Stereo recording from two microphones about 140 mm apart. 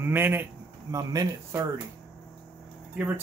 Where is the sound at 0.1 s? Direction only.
15° right (ahead or behind).